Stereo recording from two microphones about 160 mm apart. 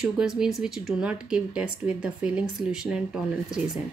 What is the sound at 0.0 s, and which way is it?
Speech, 5° right (ahead or behind).